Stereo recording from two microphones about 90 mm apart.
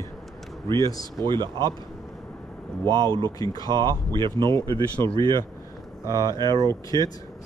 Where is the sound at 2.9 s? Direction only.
55° right (ahead or behind).